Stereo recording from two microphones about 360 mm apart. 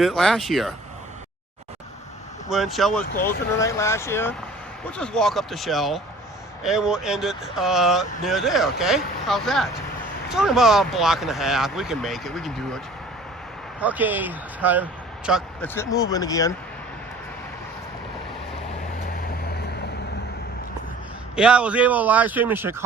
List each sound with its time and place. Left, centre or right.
0.0 s speech: centre
2.5 s speech: centre
19.4 s vehicle: left
21.3 s speech: centre